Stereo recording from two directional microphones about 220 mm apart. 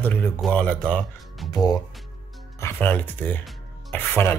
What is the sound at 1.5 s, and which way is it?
Speech, 15° left (ahead or behind).